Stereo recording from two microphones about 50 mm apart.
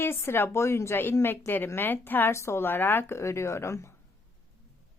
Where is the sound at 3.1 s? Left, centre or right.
Left.